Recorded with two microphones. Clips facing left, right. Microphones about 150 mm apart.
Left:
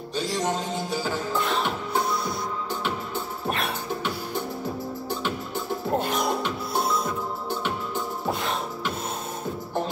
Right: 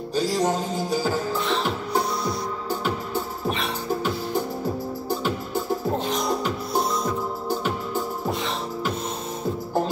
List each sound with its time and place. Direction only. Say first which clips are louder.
0.1 s music: right 4 dB; 35° right (ahead or behind)
7.4 s music: right 4 dB; 40° right (ahead or behind)